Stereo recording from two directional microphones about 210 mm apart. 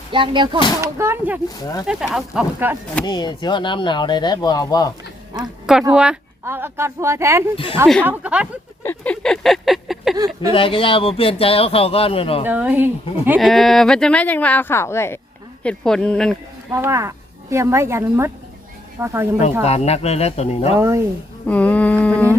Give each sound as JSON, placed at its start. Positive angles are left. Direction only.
{"t": 0.1, "sound": "speech", "side_deg": -20}
{"t": 3.0, "sound": "speech", "side_deg": 20}
{"t": 5.9, "sound": "speech", "side_deg": -5}
{"t": 7.5, "sound": "speech", "side_deg": 25}
{"t": 8.0, "sound": "speech", "side_deg": -5}
{"t": 8.8, "sound": "a sound", "side_deg": 10}
{"t": 10.2, "sound": "a sound", "side_deg": -15}
{"t": 10.5, "sound": "speech", "side_deg": 25}
{"t": 12.5, "sound": "speech", "side_deg": -10}
{"t": 16.7, "sound": "speech", "side_deg": -15}
{"t": 19.6, "sound": "speech", "side_deg": 30}
{"t": 20.7, "sound": "speech", "side_deg": -15}
{"t": 21.4, "sound": "speech", "side_deg": 5}